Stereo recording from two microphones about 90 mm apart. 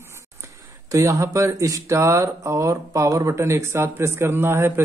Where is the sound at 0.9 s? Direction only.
35° right (ahead or behind).